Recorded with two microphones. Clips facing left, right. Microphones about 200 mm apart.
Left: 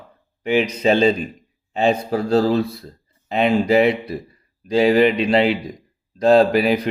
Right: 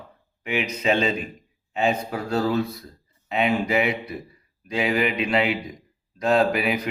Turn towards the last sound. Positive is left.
turn(degrees=35)  # may be behind; listen again after turning